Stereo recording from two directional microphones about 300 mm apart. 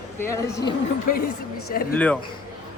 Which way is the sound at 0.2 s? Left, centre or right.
Centre.